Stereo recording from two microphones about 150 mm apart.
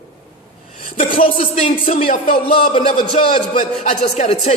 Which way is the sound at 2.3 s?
40° left (ahead or behind).